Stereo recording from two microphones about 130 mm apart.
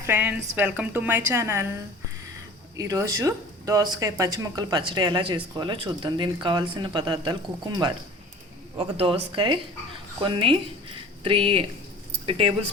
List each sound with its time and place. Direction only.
0.0 s a woman's voice: 15° right (ahead or behind)
2.7 s speech: 25° right (ahead or behind)
8.8 s speech: 45° right (ahead or behind)